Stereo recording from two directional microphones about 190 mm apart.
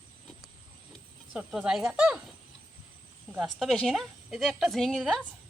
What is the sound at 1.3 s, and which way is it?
Speech, 5° right (ahead or behind).